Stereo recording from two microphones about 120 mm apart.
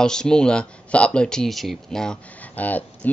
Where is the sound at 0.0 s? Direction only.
5° left (ahead or behind).